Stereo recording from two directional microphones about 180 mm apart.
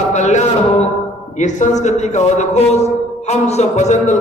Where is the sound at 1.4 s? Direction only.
40° left (ahead or behind).